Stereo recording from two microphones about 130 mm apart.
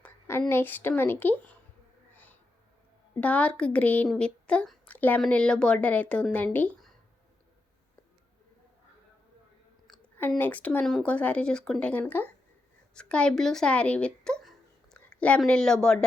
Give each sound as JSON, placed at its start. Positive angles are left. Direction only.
{"t": 0.0, "sound": "speech", "side_deg": 20}
{"t": 2.1, "sound": "a sound", "side_deg": 15}
{"t": 3.2, "sound": "a woman's voice", "side_deg": 10}
{"t": 10.2, "sound": "speech", "side_deg": 15}